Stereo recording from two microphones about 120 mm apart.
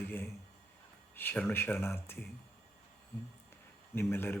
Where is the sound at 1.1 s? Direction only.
15° left (ahead or behind).